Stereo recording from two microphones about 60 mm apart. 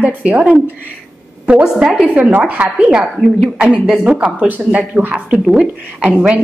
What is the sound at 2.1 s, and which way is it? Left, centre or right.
Speech, right.